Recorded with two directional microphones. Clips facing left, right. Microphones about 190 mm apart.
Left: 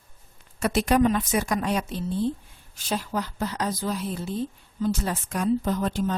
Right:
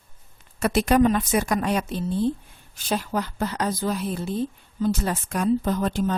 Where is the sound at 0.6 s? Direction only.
55° right (ahead or behind).